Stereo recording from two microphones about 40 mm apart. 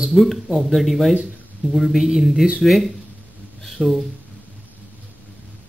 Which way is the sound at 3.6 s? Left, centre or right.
Centre.